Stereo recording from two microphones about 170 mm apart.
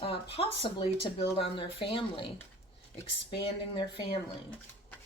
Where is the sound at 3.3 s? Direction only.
30° left (ahead or behind).